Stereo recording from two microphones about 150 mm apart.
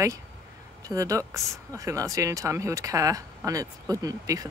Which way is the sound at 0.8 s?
20° right (ahead or behind).